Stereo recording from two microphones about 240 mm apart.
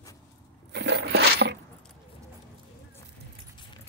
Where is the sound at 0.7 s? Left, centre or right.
Right.